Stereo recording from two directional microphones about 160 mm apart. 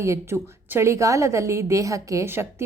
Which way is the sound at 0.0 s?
15° right (ahead or behind).